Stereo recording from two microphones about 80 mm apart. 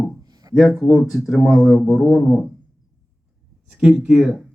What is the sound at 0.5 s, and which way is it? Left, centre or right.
Speech, centre.